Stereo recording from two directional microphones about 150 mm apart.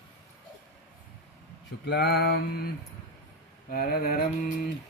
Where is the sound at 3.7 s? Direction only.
90° left.